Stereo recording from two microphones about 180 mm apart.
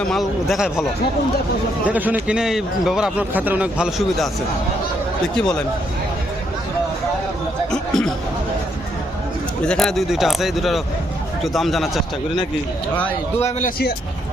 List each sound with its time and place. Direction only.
0.0 s a man's voice: centre (ahead or behind)
1.9 s a man's voice: 10° right (ahead or behind)
5.4 s a man's voice: 5° left (ahead or behind)
7.7 s chatter: 5° left (ahead or behind)
9.6 s a man's voice: centre (ahead or behind)
13.4 s a man's voice: 45° left (ahead or behind)